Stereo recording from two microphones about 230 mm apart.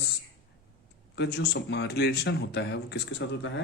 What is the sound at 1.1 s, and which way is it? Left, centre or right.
A man's voice, left.